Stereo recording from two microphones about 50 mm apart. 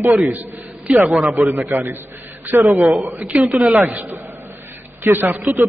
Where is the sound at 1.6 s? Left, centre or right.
Right.